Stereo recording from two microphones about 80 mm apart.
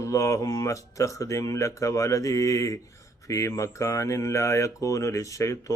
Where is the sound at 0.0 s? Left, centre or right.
Left.